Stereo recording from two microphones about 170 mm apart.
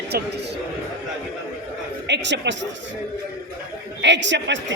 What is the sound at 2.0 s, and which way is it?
Speech, 90° right.